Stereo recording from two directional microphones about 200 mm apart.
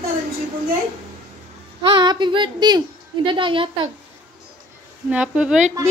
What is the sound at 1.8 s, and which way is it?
A woman's voice, 25° right (ahead or behind).